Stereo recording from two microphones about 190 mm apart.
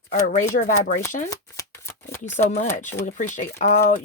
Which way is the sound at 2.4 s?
40° left (ahead or behind).